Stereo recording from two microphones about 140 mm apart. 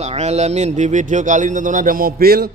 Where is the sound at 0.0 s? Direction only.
50° right (ahead or behind); by 2.5 s 90° right.